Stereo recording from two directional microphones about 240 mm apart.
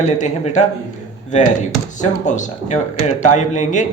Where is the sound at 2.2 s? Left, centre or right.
Left.